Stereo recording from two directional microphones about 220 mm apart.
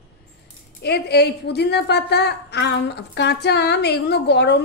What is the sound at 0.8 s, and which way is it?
A woman's voice, 50° left (ahead or behind).